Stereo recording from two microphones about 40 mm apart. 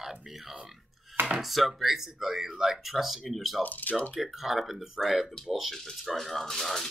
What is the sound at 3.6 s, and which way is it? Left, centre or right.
Speech, left.